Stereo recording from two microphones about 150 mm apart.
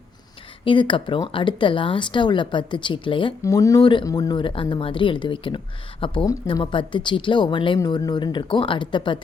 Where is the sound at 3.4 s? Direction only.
20° left (ahead or behind).